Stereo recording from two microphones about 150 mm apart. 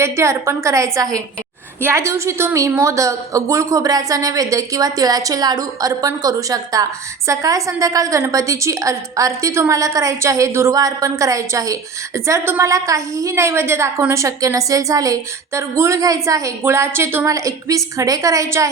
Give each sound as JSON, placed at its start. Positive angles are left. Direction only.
{"t": 0.0, "sound": "a woman's voice", "side_deg": -20}